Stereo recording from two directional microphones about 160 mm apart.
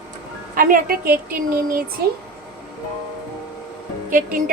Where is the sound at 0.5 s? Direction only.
60° right (ahead or behind).